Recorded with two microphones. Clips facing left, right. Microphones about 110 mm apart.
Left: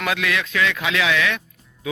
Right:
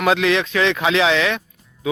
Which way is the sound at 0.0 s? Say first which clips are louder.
Right 7 dB; 25° right (ahead or behind).